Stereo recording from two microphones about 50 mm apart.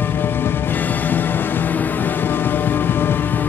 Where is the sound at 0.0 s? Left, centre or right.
Left.